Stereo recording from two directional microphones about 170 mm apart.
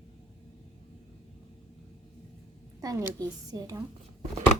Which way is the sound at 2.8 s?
20° right (ahead or behind).